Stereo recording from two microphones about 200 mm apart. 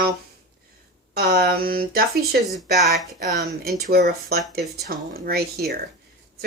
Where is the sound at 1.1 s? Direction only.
50° right (ahead or behind).